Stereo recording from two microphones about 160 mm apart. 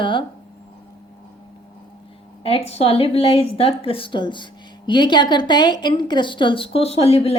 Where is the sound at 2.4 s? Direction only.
40° left (ahead or behind).